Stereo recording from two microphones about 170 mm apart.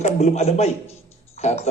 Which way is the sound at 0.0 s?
40° left (ahead or behind).